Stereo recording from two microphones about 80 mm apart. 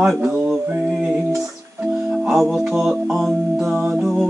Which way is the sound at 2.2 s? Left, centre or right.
Centre.